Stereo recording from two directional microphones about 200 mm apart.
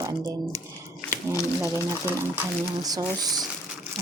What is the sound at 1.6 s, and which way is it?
Speech, 10° right (ahead or behind).